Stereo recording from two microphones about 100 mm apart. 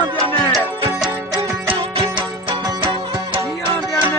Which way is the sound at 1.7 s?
55° right (ahead or behind).